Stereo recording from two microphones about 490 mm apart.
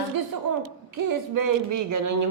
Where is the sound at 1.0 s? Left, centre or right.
Right.